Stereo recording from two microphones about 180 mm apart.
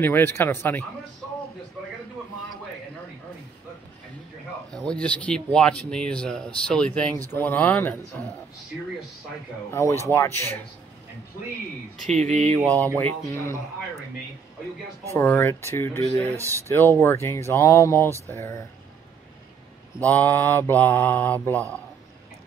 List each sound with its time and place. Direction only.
0.0 s mantra: 10° left (ahead or behind)
4.7 s speech: 5° left (ahead or behind)
7.3 s mantra: 10° left (ahead or behind)
9.7 s mantra: 15° left (ahead or behind)
12.1 s speech: 40° right (ahead or behind)
12.5 s mantra: 10° left (ahead or behind)
15.0 s mantra: 15° left (ahead or behind)
16.3 s speech: 15° right (ahead or behind)
16.6 s mantra: 15° left (ahead or behind)
20.0 s mantra: 10° left (ahead or behind)